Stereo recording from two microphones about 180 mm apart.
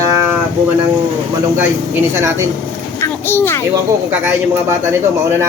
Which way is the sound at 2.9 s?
15° left (ahead or behind).